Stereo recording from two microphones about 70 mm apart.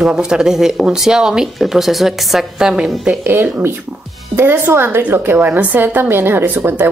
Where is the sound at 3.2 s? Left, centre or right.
Right.